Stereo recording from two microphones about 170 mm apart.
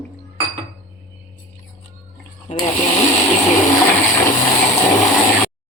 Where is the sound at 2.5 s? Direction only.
40° left (ahead or behind).